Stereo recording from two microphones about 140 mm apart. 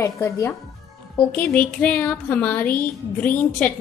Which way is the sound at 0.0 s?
20° left (ahead or behind).